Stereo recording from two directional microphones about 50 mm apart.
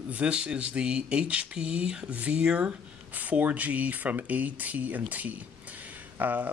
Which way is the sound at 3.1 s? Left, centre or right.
Right.